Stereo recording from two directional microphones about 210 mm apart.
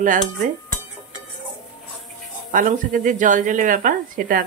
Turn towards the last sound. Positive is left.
turn(degrees=-40)  # may be behind; listen again after turning